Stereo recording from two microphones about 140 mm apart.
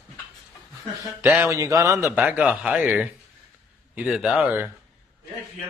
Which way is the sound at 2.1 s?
10° right (ahead or behind).